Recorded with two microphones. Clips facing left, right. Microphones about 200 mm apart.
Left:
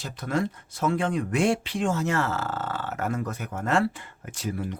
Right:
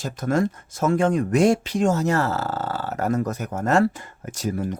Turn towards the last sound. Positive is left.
turn(degrees=-45)  # may be behind; listen again after turning